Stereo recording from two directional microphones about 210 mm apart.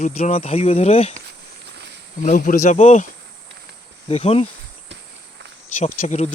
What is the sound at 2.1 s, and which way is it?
Speech, 40° left (ahead or behind).